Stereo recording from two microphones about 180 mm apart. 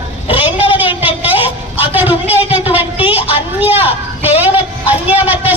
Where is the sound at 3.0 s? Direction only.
30° left (ahead or behind).